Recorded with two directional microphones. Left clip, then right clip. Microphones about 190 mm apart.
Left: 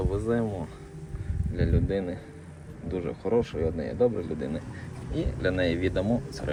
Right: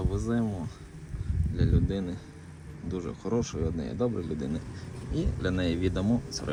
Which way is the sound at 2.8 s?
25° right (ahead or behind).